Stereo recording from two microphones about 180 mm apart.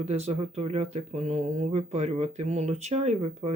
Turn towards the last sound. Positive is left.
turn(degrees=-35)  # may be behind; listen again after turning